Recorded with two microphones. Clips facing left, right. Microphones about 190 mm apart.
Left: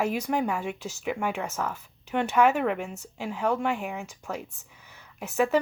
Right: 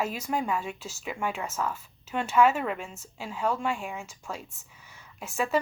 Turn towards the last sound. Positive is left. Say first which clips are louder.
# left 4 dB
turn(degrees=65)  # may be behind; listen again after turning